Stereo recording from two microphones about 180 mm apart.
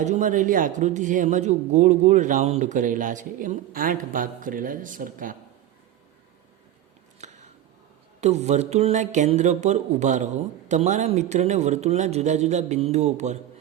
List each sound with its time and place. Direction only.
0.0 s speech: 45° right (ahead or behind)
8.2 s speech: 40° right (ahead or behind)